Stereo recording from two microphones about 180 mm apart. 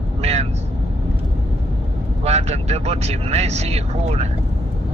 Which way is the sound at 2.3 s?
35° right (ahead or behind).